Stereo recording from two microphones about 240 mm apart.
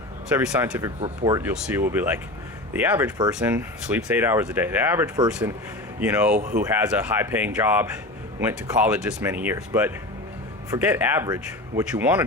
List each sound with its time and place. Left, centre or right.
0.3 s speech: centre
6.3 s speech: right
6.6 s speech: centre